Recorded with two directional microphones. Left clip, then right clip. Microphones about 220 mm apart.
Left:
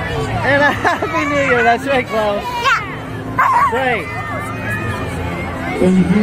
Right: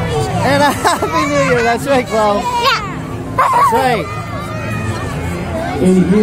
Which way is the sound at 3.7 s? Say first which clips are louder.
Right 3 dB; 15° right (ahead or behind).